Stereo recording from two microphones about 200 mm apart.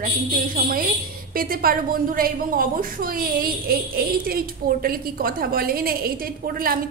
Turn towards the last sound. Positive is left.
turn(degrees=-45)  # may be behind; listen again after turning